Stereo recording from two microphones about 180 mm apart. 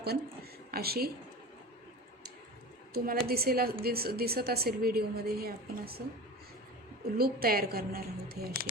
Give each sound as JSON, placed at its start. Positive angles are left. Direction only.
{"t": 0.7, "sound": "a woman's voice", "side_deg": -60}
{"t": 2.9, "sound": "a woman's voice", "side_deg": -55}
{"t": 7.2, "sound": "a woman's voice", "side_deg": -55}